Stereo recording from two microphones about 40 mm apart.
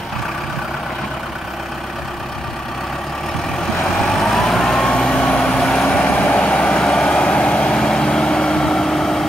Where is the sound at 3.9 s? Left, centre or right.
Centre.